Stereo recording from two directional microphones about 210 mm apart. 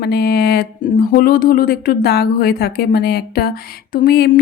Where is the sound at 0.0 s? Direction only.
50° left (ahead or behind).